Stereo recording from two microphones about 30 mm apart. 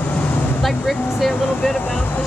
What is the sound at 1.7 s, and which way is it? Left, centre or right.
Speech, left.